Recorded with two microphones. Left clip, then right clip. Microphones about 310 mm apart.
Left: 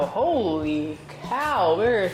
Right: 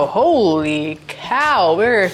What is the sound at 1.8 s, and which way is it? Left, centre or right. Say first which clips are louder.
Speech: right 7 dB; right.